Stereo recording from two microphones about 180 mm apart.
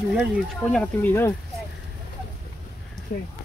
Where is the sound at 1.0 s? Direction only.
15° left (ahead or behind).